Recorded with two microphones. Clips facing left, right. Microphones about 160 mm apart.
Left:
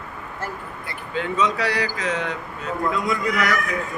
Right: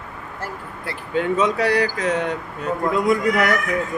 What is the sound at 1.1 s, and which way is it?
Speech, 50° right (ahead or behind).